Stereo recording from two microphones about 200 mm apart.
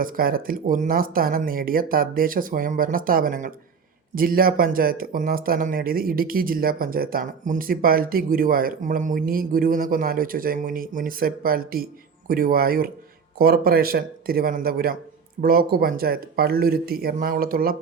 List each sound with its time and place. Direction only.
0.0 s speech: 45° right (ahead or behind)